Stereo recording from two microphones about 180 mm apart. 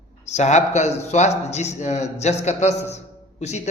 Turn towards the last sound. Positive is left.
turn(degrees=40)  # may be behind; listen again after turning